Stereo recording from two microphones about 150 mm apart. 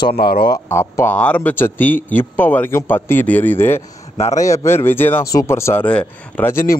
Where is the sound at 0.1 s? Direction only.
90° left.